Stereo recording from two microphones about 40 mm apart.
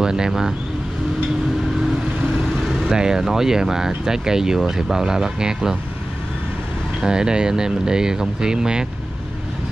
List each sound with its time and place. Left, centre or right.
0.0 s speech: centre
2.9 s speech: centre
7.1 s speech: centre